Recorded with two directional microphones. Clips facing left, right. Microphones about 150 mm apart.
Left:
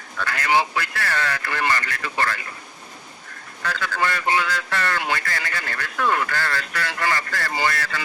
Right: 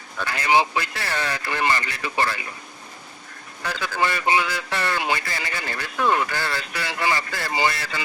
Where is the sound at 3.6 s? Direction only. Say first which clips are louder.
Even; 15° right (ahead or behind).